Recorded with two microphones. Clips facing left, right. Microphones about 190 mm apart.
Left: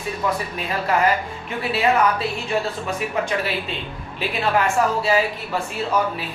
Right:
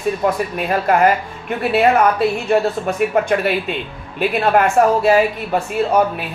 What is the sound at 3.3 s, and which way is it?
A woman's voice, 55° right (ahead or behind).